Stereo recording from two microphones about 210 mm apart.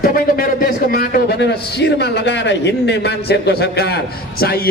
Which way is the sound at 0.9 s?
45° left (ahead or behind).